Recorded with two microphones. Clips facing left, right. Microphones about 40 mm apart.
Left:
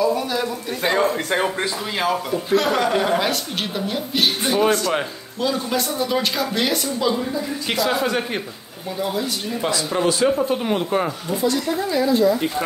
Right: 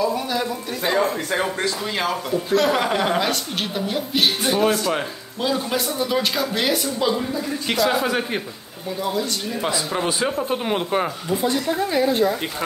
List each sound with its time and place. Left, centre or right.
0.0 s a sound: centre
2.0 s a woman's voice: centre
2.8 s speech: centre
3.2 s a woman's voice: centre
10.2 s speech: centre
11.9 s speech: right